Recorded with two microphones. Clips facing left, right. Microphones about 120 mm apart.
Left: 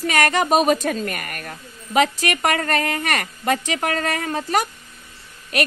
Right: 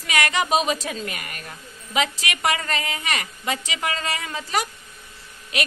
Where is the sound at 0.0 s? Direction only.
45° left (ahead or behind).